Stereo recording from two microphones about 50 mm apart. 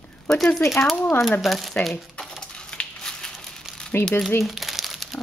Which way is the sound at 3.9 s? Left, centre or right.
Left.